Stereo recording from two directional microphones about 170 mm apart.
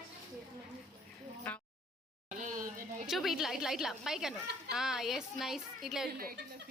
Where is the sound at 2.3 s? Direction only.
50° right (ahead or behind).